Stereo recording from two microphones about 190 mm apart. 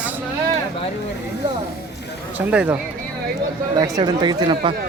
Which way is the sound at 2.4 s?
10° right (ahead or behind).